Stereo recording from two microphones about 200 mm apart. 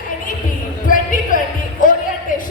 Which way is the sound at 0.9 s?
40° left (ahead or behind).